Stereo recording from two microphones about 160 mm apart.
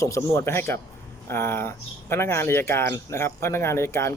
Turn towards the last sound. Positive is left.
turn(degrees=15)  # may be behind; listen again after turning